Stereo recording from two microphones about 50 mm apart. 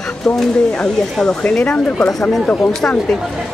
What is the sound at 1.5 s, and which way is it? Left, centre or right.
Speech, left.